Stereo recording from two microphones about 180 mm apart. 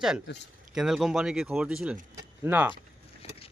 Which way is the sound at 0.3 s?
75° left (ahead or behind).